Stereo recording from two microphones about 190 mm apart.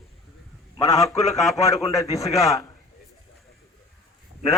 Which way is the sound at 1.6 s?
15° left (ahead or behind).